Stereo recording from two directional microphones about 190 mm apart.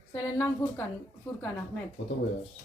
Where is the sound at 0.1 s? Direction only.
10° left (ahead or behind).